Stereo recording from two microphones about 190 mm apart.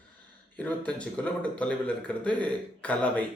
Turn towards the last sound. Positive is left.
turn(degrees=5)  # may be behind; listen again after turning